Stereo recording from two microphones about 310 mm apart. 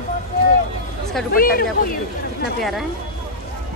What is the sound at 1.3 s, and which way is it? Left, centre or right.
Speech, left.